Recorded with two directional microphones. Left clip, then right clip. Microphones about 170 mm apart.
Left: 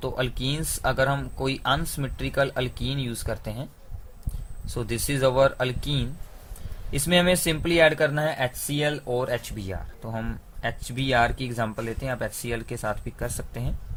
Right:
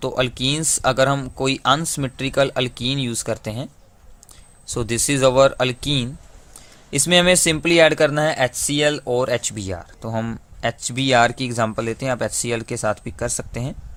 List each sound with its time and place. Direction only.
0.0 s speech: 45° right (ahead or behind)